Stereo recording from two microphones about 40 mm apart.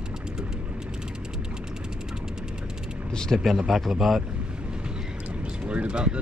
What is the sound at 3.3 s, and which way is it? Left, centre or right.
Speech, centre.